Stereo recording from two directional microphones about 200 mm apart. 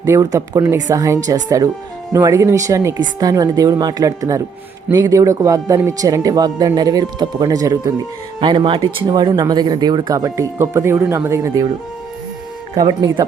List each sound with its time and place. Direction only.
0.0 s speech: 15° right (ahead or behind)
12.7 s speech: 20° right (ahead or behind)